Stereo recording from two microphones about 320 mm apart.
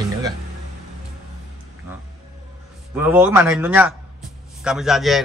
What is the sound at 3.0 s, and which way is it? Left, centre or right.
Speech, centre.